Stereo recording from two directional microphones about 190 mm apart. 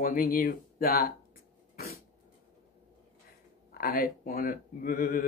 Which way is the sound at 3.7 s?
50° left (ahead or behind).